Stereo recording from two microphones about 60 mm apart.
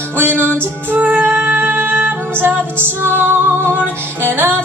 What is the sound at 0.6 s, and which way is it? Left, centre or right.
Music, right.